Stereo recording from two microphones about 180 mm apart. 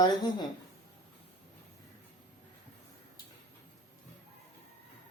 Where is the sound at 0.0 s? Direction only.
25° left (ahead or behind).